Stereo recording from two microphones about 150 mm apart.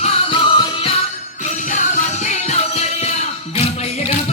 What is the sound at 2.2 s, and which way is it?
Music, 50° left (ahead or behind).